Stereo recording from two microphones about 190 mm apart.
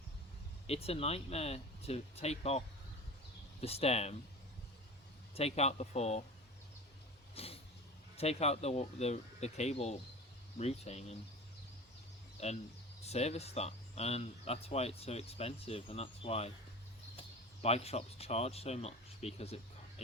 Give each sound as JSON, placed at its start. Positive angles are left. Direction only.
{"t": 0.7, "sound": "speech", "side_deg": 30}
{"t": 5.3, "sound": "speech", "side_deg": 35}
{"t": 7.3, "sound": "a sound", "side_deg": 30}
{"t": 8.1, "sound": "speech", "side_deg": 35}
{"t": 12.4, "sound": "speech", "side_deg": 35}
{"t": 17.6, "sound": "speech", "side_deg": 35}